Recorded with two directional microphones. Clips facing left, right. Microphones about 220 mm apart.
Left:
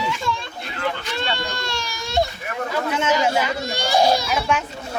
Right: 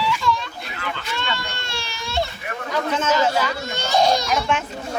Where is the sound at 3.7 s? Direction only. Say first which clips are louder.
Left 1 dB; 10° left (ahead or behind).